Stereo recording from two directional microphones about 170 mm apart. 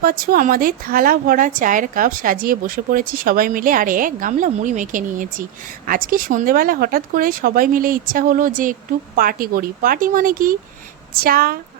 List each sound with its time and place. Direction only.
0.0 s a woman's voice: 55° right (ahead or behind)